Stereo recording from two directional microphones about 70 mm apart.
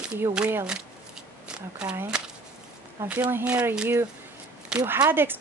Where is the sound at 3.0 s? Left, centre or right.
Right.